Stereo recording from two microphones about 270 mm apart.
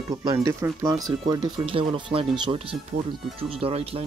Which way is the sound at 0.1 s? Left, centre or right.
Centre.